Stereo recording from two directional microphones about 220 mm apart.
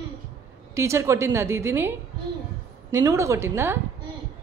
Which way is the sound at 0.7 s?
15° right (ahead or behind).